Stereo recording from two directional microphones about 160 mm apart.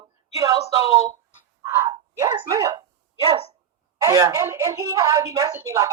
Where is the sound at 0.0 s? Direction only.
20° right (ahead or behind).